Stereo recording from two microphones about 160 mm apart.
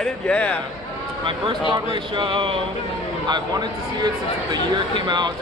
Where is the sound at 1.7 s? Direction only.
30° right (ahead or behind).